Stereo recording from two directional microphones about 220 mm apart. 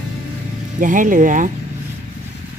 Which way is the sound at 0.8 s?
35° right (ahead or behind).